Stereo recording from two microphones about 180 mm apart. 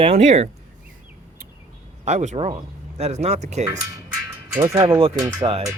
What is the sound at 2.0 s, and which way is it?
Speech, 40° right (ahead or behind).